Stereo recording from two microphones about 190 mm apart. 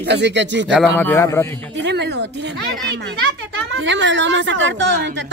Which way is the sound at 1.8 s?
65° right (ahead or behind).